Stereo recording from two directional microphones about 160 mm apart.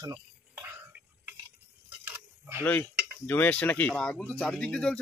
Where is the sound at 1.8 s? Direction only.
10° right (ahead or behind).